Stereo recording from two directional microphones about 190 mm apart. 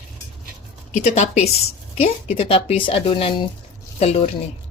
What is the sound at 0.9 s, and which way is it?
Speech, 35° left (ahead or behind).